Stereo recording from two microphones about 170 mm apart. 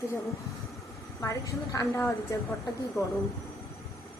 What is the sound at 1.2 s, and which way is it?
A woman's voice, 20° left (ahead or behind).